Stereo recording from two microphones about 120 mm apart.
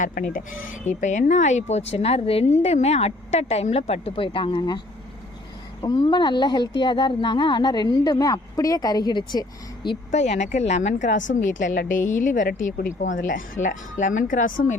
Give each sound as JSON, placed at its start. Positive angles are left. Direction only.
{"t": 0.9, "sound": "a woman's voice", "side_deg": 90}
{"t": 5.8, "sound": "speech", "side_deg": 40}
{"t": 10.1, "sound": "a woman's voice", "side_deg": 70}